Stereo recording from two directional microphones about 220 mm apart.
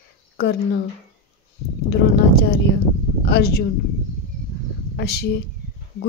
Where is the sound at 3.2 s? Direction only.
50° left (ahead or behind).